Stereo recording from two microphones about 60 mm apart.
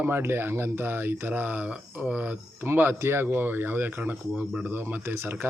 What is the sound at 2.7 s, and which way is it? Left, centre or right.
Speech, right.